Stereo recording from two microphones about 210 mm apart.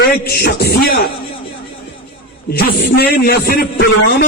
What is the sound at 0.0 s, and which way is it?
Speech, 45° left (ahead or behind).